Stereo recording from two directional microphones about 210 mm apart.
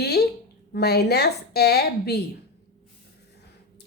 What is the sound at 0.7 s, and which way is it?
A woman's voice, 50° left (ahead or behind).